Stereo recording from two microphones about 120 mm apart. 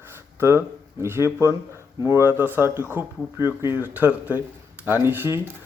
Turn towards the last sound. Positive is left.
turn(degrees=-20)  # may be behind; listen again after turning